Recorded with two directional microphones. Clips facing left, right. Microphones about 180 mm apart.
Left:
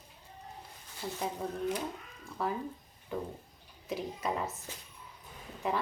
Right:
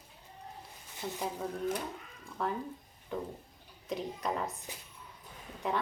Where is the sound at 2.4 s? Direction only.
5° left (ahead or behind).